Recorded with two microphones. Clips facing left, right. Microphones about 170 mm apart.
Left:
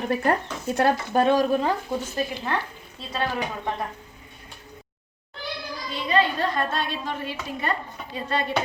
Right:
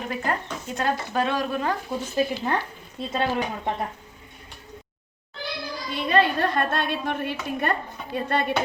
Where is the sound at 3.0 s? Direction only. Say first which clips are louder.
Right 4 dB; 20° right (ahead or behind).